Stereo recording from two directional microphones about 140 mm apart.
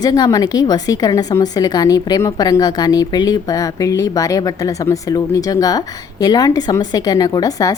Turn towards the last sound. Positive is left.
turn(degrees=25)  # may be behind; listen again after turning